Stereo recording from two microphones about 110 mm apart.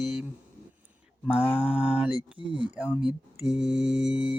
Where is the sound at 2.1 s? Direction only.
50° right (ahead or behind).